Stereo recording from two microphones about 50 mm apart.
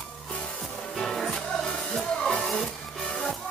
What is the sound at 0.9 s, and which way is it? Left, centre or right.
Music, centre.